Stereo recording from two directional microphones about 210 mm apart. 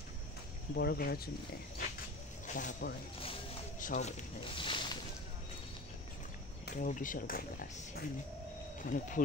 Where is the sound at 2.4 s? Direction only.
40° left (ahead or behind).